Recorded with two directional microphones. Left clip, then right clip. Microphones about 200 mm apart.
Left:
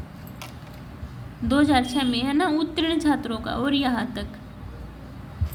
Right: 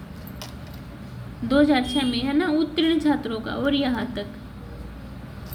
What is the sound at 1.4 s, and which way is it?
A woman's voice, 30° left (ahead or behind).